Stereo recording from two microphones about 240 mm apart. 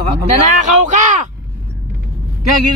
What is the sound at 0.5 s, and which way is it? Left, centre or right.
Speech, right.